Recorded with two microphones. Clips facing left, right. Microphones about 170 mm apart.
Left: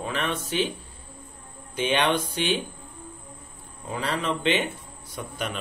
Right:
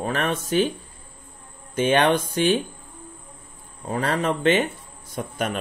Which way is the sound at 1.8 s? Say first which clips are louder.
Right 5 dB; 45° right (ahead or behind).